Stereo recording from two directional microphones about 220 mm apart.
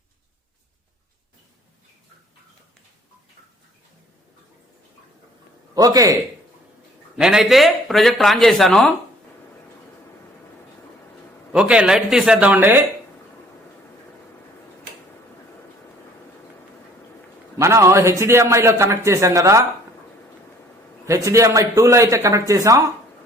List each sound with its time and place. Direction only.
5.7 s a man's voice: 15° right (ahead or behind)
7.2 s speech: 5° right (ahead or behind)
11.5 s speech: 5° right (ahead or behind)
17.6 s a man's voice: 15° right (ahead or behind)
21.1 s a man's voice: 15° right (ahead or behind)